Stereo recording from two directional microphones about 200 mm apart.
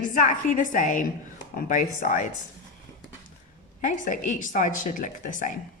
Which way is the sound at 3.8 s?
40° left (ahead or behind).